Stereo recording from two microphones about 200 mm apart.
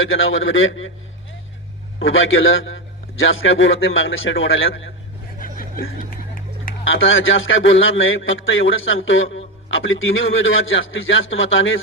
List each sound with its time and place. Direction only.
0.0 s a man's voice: 75° left (ahead or behind)
2.0 s a man's voice: 75° left (ahead or behind)
5.4 s snicker: 45° left (ahead or behind)
6.8 s a man's voice: 75° left (ahead or behind)